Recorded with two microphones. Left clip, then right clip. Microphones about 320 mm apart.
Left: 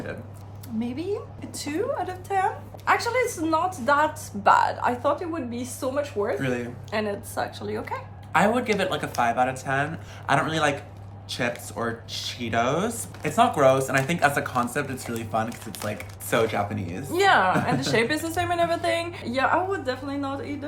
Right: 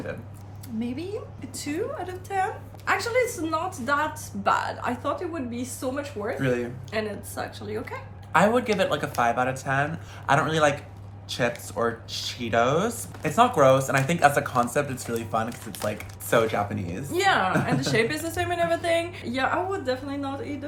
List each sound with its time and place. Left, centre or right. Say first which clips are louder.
0.8 s a woman's voice: left 3 dB; centre
6.4 s speech: right 2 dB; centre
6.9 s a woman's voice: left 3 dB; centre
8.3 s speech: right 1 dB; centre
17.1 s a woman's voice: left 3 dB; centre